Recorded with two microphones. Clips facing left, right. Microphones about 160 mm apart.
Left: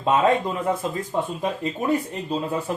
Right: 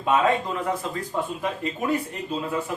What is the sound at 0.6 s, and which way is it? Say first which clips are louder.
Speech: left 3 dB; 25° left (ahead or behind).